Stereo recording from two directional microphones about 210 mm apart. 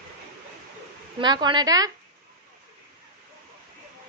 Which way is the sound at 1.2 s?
20° right (ahead or behind).